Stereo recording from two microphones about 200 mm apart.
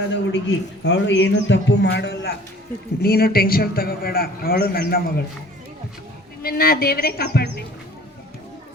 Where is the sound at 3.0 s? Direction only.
50° left (ahead or behind).